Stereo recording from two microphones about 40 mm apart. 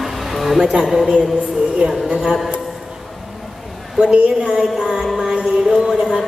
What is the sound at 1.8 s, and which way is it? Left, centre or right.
Speech, right.